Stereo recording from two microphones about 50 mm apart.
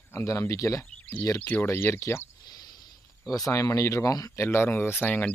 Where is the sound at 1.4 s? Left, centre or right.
Left.